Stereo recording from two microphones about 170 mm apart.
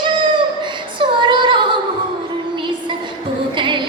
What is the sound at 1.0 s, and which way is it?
Female singing, 30° right (ahead or behind).